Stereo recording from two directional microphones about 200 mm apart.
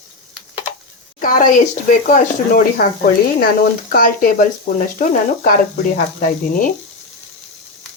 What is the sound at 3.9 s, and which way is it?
Speech, 45° left (ahead or behind).